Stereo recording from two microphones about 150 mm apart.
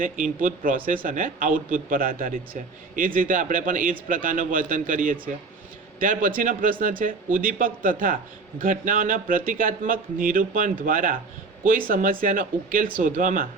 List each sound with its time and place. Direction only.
0.4 s a man's voice: 65° right (ahead or behind)